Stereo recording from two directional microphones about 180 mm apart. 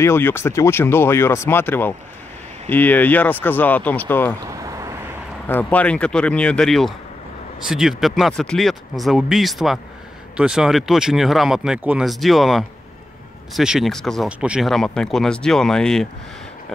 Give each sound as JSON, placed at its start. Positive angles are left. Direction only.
{"t": 0.0, "sound": "speech", "side_deg": 15}
{"t": 4.5, "sound": "vehicle", "side_deg": -20}
{"t": 5.5, "sound": "speech", "side_deg": 10}